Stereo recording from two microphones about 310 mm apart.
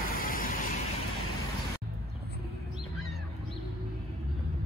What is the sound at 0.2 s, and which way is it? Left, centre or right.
Vehicle, left.